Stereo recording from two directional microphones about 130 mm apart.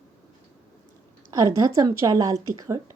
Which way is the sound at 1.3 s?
30° right (ahead or behind).